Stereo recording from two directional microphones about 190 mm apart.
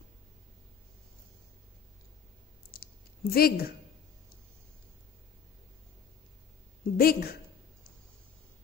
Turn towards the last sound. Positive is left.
turn(degrees=50)  # may be behind; listen again after turning